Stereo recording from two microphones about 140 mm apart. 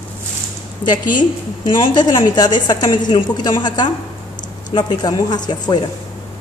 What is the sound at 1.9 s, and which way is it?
A woman's voice, 30° left (ahead or behind).